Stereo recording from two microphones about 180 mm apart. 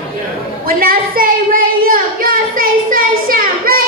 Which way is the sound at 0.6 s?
55° right (ahead or behind).